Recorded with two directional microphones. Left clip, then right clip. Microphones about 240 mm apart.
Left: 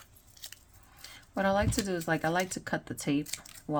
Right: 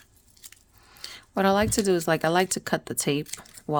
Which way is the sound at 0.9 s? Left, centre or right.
Right.